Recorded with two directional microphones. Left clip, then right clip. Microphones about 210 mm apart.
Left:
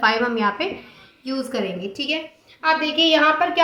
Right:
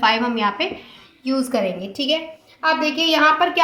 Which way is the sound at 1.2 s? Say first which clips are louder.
Right 5 dB; 45° right (ahead or behind).